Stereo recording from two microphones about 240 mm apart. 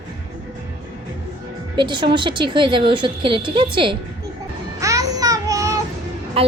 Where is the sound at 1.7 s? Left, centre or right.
Centre.